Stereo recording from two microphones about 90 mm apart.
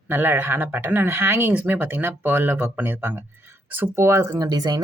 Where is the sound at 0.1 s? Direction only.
25° right (ahead or behind).